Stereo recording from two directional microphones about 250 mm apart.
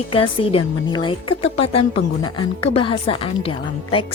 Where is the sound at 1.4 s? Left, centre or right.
Left.